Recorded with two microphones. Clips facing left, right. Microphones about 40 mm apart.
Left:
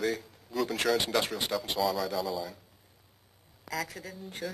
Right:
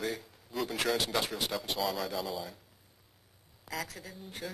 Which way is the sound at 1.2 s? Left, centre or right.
Centre.